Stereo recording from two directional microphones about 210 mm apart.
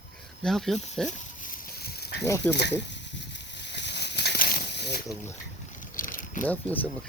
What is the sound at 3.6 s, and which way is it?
Snake, 55° left (ahead or behind).